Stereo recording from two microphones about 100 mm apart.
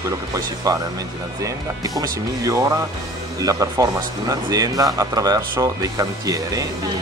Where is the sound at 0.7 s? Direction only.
35° right (ahead or behind).